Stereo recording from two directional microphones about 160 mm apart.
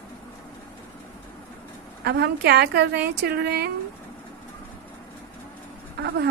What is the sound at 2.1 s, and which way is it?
A woman's voice, 90° right.